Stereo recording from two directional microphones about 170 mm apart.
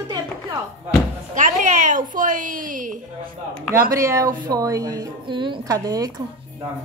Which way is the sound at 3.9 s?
20° right (ahead or behind).